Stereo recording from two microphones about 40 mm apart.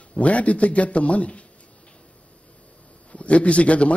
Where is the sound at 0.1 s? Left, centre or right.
Left.